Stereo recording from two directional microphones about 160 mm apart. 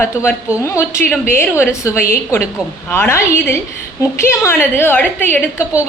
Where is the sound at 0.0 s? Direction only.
15° left (ahead or behind).